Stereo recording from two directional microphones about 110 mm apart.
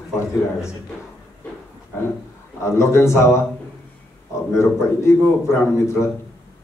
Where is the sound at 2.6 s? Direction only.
25° left (ahead or behind).